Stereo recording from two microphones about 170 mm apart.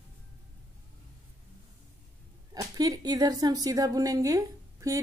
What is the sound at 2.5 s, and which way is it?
A woman's voice, 20° right (ahead or behind).